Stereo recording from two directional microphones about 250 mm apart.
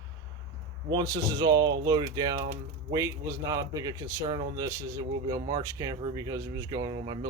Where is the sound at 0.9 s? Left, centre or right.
Centre.